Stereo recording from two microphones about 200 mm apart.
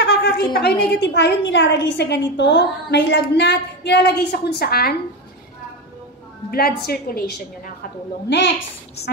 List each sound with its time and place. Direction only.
0.0 s a sound: 50° left (ahead or behind)
0.8 s a woman's voice: 60° left (ahead or behind)
6.5 s a woman's voice: 50° left (ahead or behind)